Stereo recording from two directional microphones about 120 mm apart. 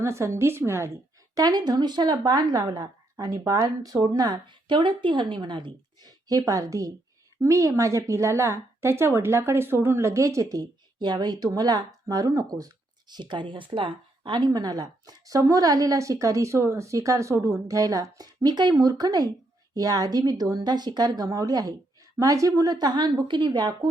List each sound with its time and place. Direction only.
0.0 s a woman's voice: 20° right (ahead or behind)
1.4 s a woman's voice: 35° right (ahead or behind)